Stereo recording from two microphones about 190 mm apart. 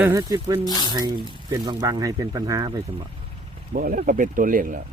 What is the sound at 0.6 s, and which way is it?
Speech, 20° left (ahead or behind).